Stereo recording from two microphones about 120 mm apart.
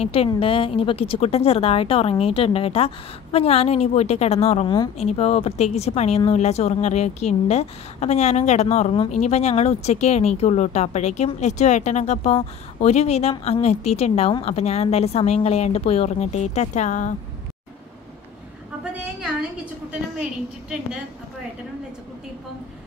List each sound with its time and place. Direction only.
0.0 s speech: 55° left (ahead or behind); by 17.1 s 85° left